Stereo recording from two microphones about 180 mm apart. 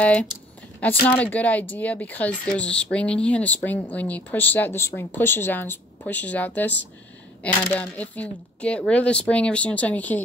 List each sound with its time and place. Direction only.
0.0 s speech: 10° left (ahead or behind)